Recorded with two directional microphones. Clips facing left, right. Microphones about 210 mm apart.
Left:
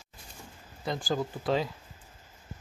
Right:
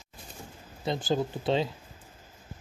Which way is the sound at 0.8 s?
25° right (ahead or behind).